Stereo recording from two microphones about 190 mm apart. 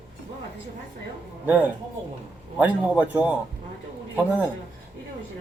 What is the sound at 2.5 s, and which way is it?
Speech, 10° right (ahead or behind).